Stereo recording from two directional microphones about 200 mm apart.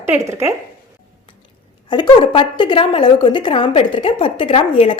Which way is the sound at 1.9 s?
20° left (ahead or behind).